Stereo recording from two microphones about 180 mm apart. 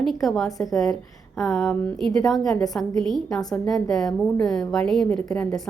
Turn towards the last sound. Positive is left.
turn(degrees=5)  # may be behind; listen again after turning